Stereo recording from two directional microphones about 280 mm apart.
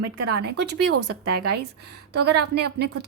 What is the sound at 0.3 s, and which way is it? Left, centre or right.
A woman's voice, right.